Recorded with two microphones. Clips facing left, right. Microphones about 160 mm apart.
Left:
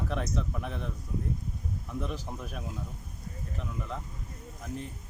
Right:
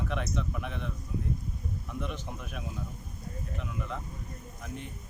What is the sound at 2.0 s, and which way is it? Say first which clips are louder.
Speech: left 2 dB; 35° left (ahead or behind).